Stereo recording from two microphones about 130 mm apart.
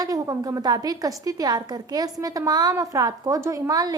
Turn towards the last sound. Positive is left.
turn(degrees=-25)  # may be behind; listen again after turning